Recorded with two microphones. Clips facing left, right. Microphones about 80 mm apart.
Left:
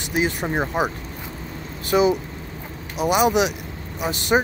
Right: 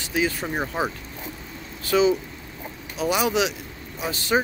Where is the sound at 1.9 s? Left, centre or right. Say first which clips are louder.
Left 2 dB; left.